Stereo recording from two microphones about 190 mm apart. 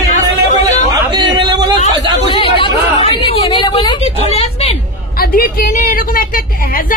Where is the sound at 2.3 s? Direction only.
25° left (ahead or behind).